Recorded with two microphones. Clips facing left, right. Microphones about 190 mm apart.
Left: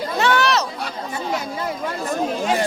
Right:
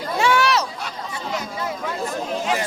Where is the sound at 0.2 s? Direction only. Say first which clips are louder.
Even; 10° right (ahead or behind).